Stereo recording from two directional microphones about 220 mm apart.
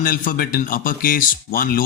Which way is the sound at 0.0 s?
40° left (ahead or behind).